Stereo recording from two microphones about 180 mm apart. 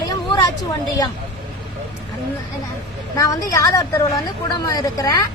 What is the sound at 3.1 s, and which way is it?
A woman's voice, 20° left (ahead or behind).